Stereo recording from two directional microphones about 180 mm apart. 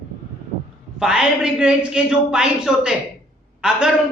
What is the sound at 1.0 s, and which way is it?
A man's voice, 5° right (ahead or behind).